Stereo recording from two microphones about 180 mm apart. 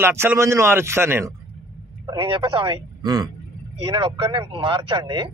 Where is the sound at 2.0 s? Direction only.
30° right (ahead or behind).